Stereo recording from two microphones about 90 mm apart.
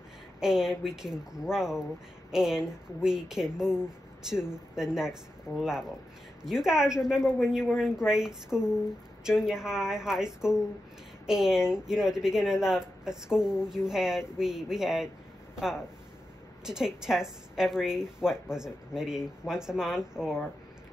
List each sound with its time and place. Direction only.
0.4 s speech: 5° right (ahead or behind)